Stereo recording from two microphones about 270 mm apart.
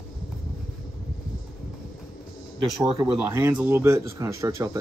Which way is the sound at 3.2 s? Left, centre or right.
Centre.